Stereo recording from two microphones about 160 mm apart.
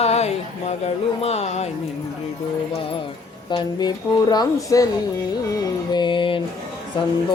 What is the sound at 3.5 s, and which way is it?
Speech, 25° left (ahead or behind).